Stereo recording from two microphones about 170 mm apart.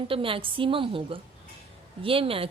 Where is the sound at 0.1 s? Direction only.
30° right (ahead or behind).